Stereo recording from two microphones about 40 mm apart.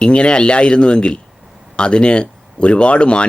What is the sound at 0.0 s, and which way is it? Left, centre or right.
Speech, left.